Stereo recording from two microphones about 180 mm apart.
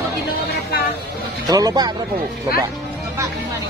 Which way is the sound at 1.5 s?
20° right (ahead or behind).